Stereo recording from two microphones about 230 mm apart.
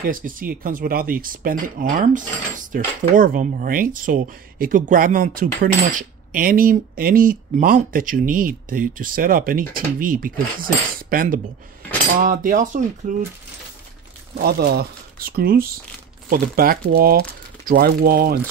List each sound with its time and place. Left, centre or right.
0.0 s speech: right
14.3 s speech: right